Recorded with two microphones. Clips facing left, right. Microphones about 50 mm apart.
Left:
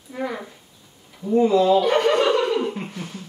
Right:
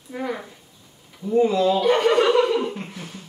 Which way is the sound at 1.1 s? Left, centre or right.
Centre.